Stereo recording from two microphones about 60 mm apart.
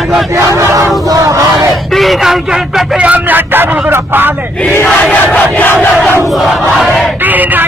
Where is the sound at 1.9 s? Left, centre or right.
Centre.